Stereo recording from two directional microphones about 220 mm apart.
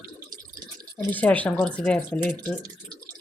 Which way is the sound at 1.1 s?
5° left (ahead or behind).